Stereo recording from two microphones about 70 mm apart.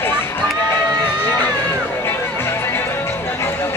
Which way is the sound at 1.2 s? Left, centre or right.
Left.